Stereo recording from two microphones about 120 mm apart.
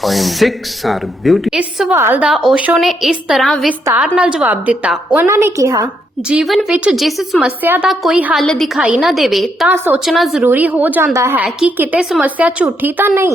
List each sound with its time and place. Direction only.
0.0 s a woman's voice: centre (ahead or behind); by 2.3 s 15° right (ahead or behind)
2.3 s a woman's voice: centre (ahead or behind)
2.6 s a woman's voice: 10° right (ahead or behind)
5.2 s a woman's voice: 25° right (ahead or behind)
6.2 s a woman's voice: 5° right (ahead or behind)
7.6 s a woman's voice: 15° right (ahead or behind)
7.9 s a woman's voice: centre (ahead or behind)
9.6 s a woman's voice: 15° right (ahead or behind)
10.0 s a woman's voice: centre (ahead or behind)
10.4 s a woman's voice: 15° right (ahead or behind)